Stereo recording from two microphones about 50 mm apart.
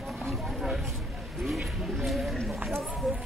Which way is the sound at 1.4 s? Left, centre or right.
Centre.